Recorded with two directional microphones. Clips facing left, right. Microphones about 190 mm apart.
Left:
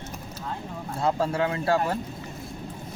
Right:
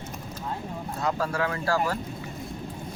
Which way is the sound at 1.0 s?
25° left (ahead or behind).